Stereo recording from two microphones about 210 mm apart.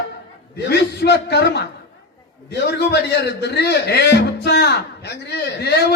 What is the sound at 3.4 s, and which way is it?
A man's voice, 50° left (ahead or behind).